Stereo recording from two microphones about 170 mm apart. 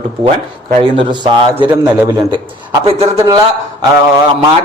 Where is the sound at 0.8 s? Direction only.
30° right (ahead or behind).